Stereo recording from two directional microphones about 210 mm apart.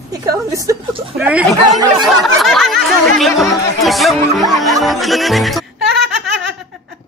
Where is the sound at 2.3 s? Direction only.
Centre (ahead or behind).